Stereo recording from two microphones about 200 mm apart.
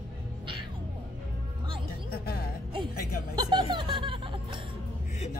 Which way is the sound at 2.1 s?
50° left (ahead or behind).